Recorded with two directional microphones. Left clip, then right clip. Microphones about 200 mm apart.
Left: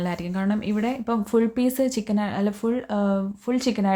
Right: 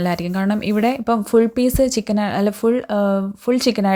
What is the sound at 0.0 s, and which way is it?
Speech, 35° right (ahead or behind).